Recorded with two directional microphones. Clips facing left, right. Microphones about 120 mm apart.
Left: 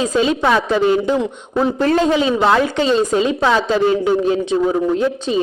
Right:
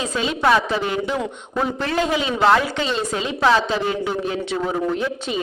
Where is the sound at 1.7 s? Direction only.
40° left (ahead or behind).